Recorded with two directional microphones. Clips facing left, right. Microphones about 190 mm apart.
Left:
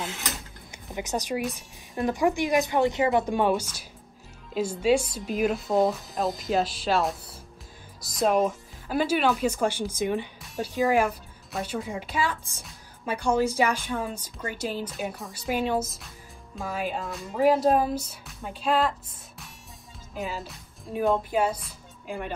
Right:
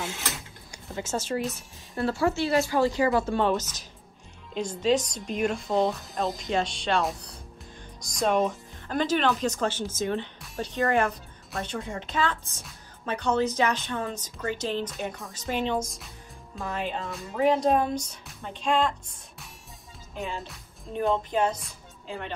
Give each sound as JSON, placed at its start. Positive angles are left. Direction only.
{"t": 0.9, "sound": "speech", "side_deg": 15}
{"t": 10.4, "sound": "speech", "side_deg": 0}